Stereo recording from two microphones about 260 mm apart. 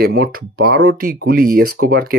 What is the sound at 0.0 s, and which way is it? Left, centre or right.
Speech, right.